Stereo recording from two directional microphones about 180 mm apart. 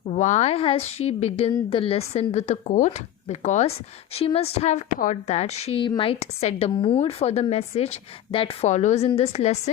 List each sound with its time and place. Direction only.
0.0 s a woman's voice: 40° left (ahead or behind)